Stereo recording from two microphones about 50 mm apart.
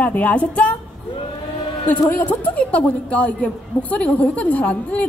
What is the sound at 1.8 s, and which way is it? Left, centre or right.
A woman's voice, left.